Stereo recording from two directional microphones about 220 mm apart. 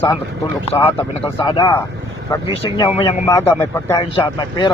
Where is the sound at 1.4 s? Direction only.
20° left (ahead or behind).